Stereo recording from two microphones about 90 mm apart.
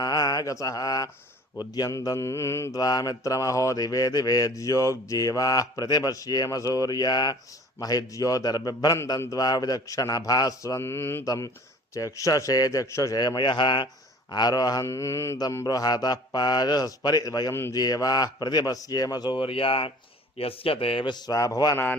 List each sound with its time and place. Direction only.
0.0 s mantra: 50° left (ahead or behind)
1.5 s speech: 45° left (ahead or behind)
2.8 s speech: 45° left (ahead or behind)
10.8 s mantra: 30° left (ahead or behind)
11.3 s speech: 40° left (ahead or behind)
13.1 s speech: 55° left (ahead or behind)
14.3 s speech: 50° left (ahead or behind)
14.8 s speech: 35° left (ahead or behind)
15.6 s speech: 50° left (ahead or behind)
17.5 s mantra: 25° left (ahead or behind)
17.7 s speech: 45° left (ahead or behind)
19.4 s a man's voice: 90° left
21.1 s speech: 40° left (ahead or behind)